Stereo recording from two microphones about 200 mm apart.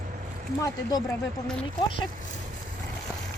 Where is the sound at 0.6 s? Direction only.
20° left (ahead or behind).